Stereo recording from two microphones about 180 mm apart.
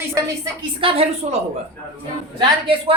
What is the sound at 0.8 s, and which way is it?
Speech, 30° right (ahead or behind).